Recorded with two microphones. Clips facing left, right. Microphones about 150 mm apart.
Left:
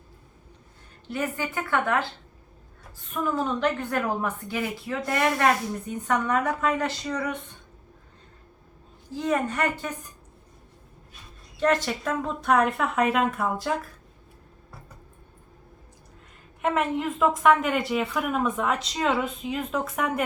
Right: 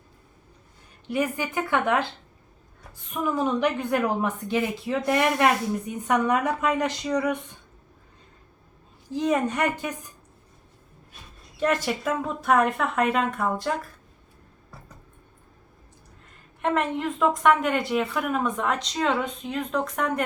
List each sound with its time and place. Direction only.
1.1 s a woman's voice: 15° right (ahead or behind)
3.1 s a woman's voice: 15° right (ahead or behind)
9.1 s speech: 20° right (ahead or behind)
11.6 s a woman's voice: 10° right (ahead or behind)
16.6 s a woman's voice: 5° left (ahead or behind)